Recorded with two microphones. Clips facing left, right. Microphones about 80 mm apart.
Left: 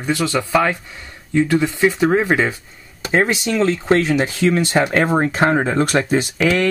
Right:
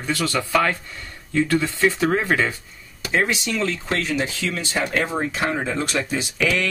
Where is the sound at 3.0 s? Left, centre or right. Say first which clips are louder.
Left 5 dB; left.